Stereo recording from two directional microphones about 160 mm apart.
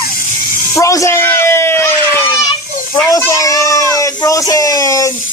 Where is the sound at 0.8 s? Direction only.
20° left (ahead or behind).